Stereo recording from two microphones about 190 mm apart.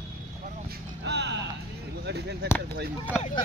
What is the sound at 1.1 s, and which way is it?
Music, 65° right (ahead or behind).